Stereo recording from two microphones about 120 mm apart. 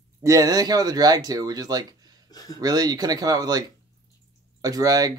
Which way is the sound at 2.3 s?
30° left (ahead or behind).